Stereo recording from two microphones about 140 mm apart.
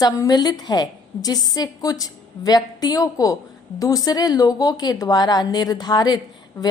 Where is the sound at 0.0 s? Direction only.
30° left (ahead or behind).